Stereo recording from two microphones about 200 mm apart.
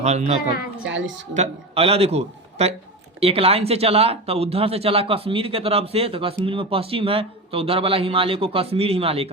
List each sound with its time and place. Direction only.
0.0 s a man's voice: 35° right (ahead or behind)
0.9 s a woman's voice: 65° right (ahead or behind)
1.3 s a man's voice: 30° right (ahead or behind)